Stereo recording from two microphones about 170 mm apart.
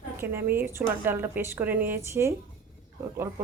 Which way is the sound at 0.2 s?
15° right (ahead or behind).